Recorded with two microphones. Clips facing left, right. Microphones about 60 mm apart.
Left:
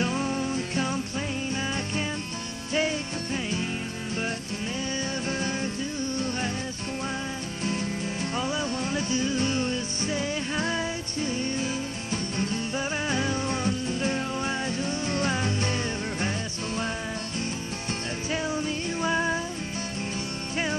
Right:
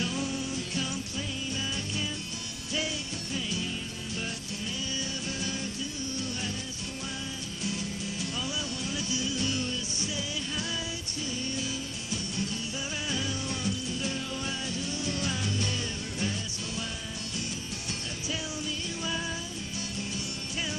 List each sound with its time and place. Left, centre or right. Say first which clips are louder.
0.0 s music: left 5 dB; left
3.3 s music: left 3 dB; left
5.4 s music: left 6 dB; left
7.6 s music: left 5 dB; left
18.3 s music: left 7 dB; left